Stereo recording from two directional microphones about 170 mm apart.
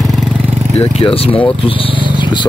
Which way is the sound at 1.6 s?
30° left (ahead or behind).